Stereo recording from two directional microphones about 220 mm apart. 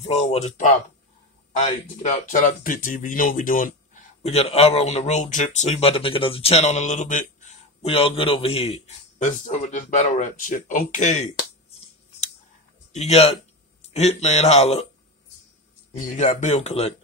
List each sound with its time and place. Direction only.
0.0 s speech: 30° left (ahead or behind)
12.9 s a man's voice: 30° left (ahead or behind)
16.1 s speech: 35° left (ahead or behind)